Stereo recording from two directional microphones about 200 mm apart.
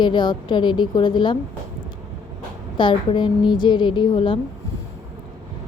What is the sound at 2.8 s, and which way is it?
A woman's voice, 25° left (ahead or behind).